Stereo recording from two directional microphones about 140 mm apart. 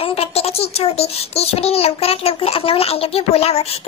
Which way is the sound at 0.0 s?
45° left (ahead or behind).